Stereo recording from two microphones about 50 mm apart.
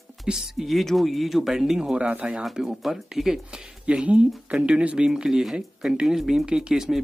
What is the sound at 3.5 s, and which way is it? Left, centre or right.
Speech, centre.